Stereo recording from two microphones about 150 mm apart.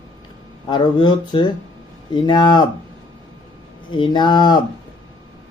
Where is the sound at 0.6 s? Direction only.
30° left (ahead or behind).